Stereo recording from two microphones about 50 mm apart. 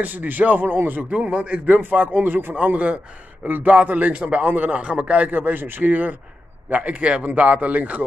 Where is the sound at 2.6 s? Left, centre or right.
Right.